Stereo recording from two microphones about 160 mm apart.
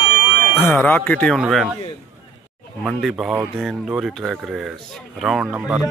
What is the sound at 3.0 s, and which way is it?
Speech, centre (ahead or behind).